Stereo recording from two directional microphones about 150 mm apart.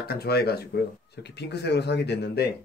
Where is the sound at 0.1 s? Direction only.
90° left.